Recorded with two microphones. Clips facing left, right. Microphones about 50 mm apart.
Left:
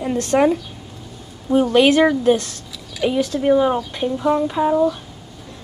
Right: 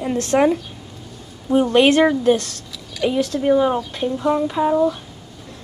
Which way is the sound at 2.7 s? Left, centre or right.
Centre.